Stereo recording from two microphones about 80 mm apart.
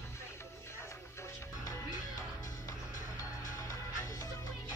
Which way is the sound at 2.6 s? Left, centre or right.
Left.